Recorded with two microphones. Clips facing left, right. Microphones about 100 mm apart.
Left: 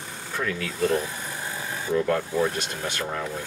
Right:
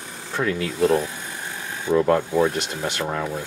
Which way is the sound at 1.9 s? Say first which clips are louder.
Right 5 dB; 35° right (ahead or behind).